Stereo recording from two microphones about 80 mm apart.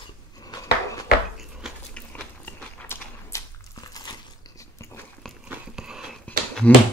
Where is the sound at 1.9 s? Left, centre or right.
Centre.